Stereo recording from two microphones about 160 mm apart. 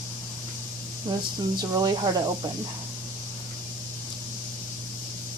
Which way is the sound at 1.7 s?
25° right (ahead or behind).